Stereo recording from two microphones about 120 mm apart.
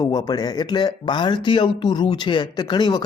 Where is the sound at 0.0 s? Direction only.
35° left (ahead or behind).